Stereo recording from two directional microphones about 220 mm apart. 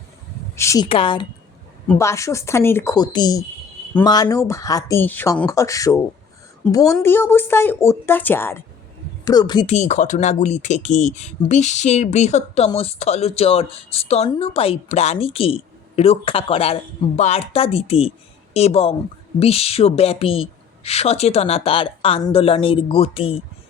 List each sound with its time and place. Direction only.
0.5 s a woman's voice: 15° left (ahead or behind)
9.7 s speech: 30° left (ahead or behind)